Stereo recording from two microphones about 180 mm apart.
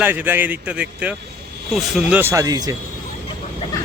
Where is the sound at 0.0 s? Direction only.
10° right (ahead or behind).